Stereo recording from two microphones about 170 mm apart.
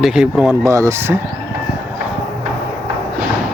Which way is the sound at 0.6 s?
20° right (ahead or behind).